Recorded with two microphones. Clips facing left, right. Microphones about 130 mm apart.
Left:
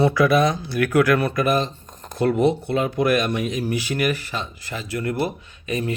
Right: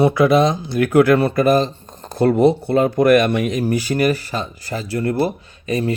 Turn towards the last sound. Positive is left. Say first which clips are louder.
# right 5 dB
turn(degrees=-35)  # may be behind; listen again after turning